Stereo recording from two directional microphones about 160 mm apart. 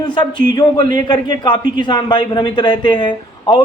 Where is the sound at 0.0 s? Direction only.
30° left (ahead or behind).